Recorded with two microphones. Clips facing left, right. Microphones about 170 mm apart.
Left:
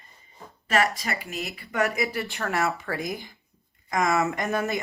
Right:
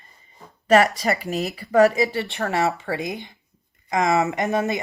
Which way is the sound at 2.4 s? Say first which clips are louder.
Right 4 dB; 25° right (ahead or behind).